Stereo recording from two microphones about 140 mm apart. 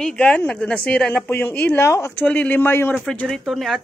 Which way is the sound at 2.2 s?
10° left (ahead or behind).